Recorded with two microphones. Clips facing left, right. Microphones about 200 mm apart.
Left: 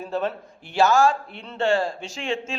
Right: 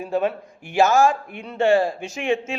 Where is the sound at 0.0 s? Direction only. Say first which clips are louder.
Right 4 dB; 10° right (ahead or behind).